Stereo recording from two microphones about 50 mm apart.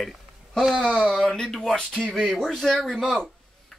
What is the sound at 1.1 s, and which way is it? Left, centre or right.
Speech, centre.